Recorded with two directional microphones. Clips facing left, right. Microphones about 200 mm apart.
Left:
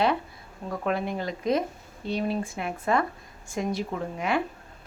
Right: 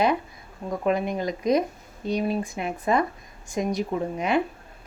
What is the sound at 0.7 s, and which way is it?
Speech, 15° right (ahead or behind).